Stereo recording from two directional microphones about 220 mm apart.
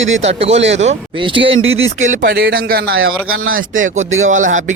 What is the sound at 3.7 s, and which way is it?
Speech, 35° right (ahead or behind).